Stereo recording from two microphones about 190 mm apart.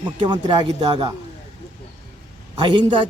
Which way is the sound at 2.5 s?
25° right (ahead or behind).